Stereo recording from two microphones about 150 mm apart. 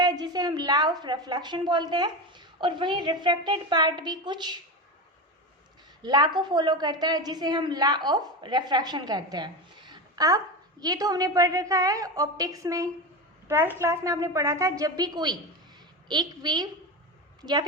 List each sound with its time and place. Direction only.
0.0 s a woman's voice: 25° right (ahead or behind)
6.0 s a woman's voice: 30° right (ahead or behind)